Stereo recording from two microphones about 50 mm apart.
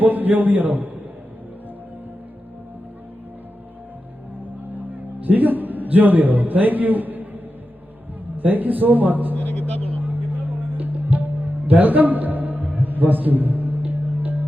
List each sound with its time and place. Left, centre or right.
0.0 s speech: right
5.2 s a man's voice: right
8.4 s speech: right
9.3 s a sound: left
10.0 s music: right